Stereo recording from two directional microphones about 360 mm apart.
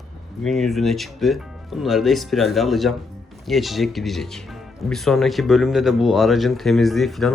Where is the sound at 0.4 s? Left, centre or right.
Centre.